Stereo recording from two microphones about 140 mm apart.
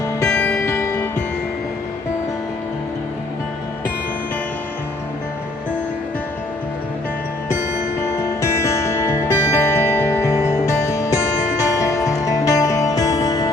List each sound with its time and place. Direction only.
0.3 s music: 5° left (ahead or behind)
0.6 s music: 20° left (ahead or behind)
8.4 s music: 20° left (ahead or behind)